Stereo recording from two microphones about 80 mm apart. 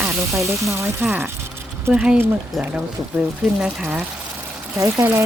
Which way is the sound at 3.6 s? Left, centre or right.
Centre.